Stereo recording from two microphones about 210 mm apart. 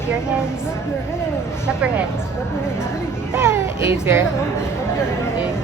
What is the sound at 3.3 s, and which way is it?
Speech, 10° right (ahead or behind).